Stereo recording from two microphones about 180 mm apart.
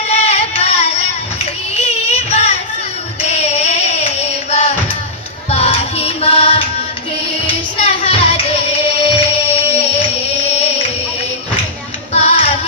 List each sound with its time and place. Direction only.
0.1 s carnatic music: 35° left (ahead or behind)
1.7 s music: 35° left (ahead or behind)
3.2 s a sound: 35° left (ahead or behind)
5.5 s music: 35° left (ahead or behind)
12.1 s music: 35° left (ahead or behind)